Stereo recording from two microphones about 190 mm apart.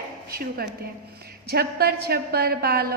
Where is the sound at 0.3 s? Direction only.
55° right (ahead or behind).